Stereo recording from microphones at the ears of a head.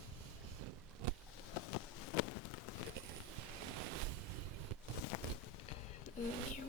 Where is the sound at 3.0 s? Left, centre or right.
Right.